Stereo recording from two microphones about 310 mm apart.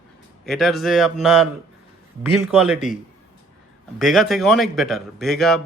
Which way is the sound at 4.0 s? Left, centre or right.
Centre.